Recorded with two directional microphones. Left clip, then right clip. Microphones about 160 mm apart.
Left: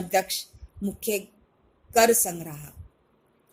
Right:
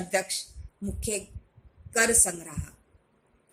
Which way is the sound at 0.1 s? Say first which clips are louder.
Left 4 dB; 20° left (ahead or behind).